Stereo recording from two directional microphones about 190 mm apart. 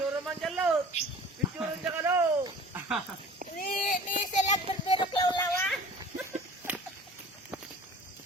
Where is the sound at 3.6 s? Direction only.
45° left (ahead or behind); by 5.4 s 25° left (ahead or behind).